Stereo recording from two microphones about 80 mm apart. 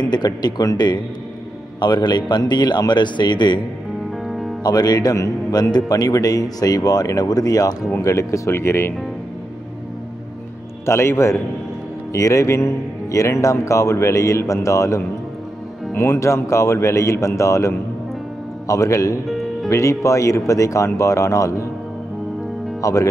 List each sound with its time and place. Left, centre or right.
0.0 s a man's voice: left
4.3 s music: centre
4.6 s a man's voice: left
10.9 s speech: left
19.2 s music: centre
19.7 s speech: left
22.8 s speech: left